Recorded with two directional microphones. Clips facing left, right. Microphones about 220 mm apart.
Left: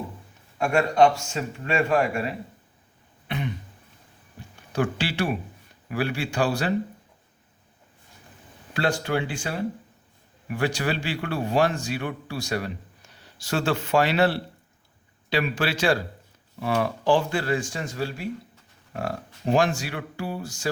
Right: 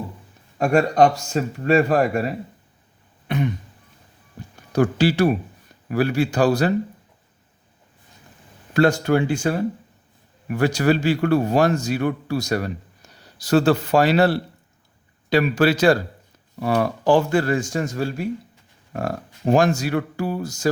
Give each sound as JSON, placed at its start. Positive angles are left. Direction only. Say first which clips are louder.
{"t": 0.6, "sound": "a man's voice", "louder": "right 3 dB", "side_deg": -35}
{"t": 3.2, "sound": "throat clearing", "louder": "right 7 dB", "side_deg": -45}
{"t": 4.7, "sound": "a man's voice", "louder": "right 8 dB", "side_deg": -40}
{"t": 8.7, "sound": "a man's voice", "louder": "right 8 dB", "side_deg": -45}